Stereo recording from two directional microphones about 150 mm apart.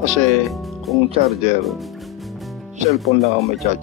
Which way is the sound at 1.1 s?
45° right (ahead or behind).